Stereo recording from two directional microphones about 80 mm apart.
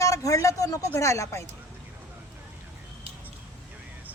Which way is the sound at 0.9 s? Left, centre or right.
Left.